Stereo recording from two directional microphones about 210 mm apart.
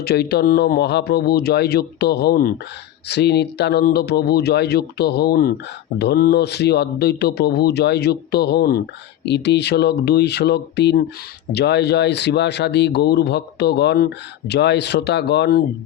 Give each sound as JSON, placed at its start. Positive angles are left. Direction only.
{"t": 0.0, "sound": "speech", "side_deg": 50}